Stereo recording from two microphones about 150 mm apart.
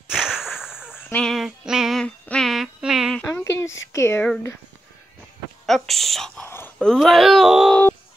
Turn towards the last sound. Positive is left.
turn(degrees=0)  # may be behind; listen again after turning